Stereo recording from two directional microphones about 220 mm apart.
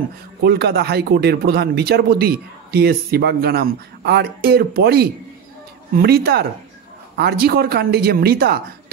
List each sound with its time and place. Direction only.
0.4 s a man's voice: 45° right (ahead or behind)